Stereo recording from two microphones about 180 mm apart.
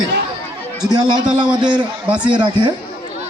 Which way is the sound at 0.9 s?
25° right (ahead or behind).